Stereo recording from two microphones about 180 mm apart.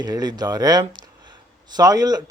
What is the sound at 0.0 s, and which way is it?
Speech, 20° right (ahead or behind).